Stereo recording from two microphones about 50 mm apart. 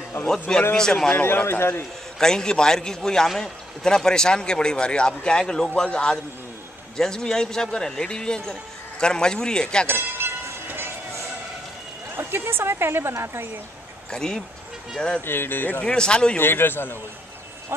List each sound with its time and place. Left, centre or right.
0.2 s a man's voice: left
0.7 s a man's voice: centre
1.2 s a man's voice: left
2.1 s a man's voice: centre
7.0 s a man's voice: centre
9.8 s a sound: right
12.2 s a woman's voice: right
14.1 s a man's voice: centre
15.2 s a man's voice: left
15.8 s a man's voice: centre
16.3 s a man's voice: left